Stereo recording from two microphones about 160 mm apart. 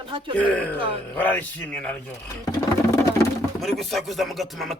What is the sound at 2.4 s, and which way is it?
Music, 20° left (ahead or behind).